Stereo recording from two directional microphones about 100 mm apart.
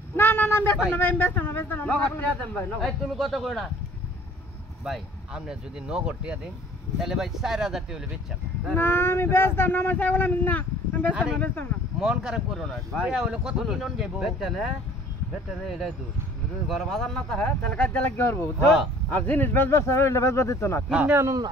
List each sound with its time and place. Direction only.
0.1 s a sound: 20° left (ahead or behind)
0.9 s speech: 20° left (ahead or behind)
2.8 s speech: centre (ahead or behind)
4.8 s speech: 5° right (ahead or behind)
8.7 s speech: 25° left (ahead or behind)
12.0 s speech: 5° right (ahead or behind)
16.6 s speech: centre (ahead or behind)
18.1 s speech: 25° left (ahead or behind)
20.9 s speech: 20° right (ahead or behind)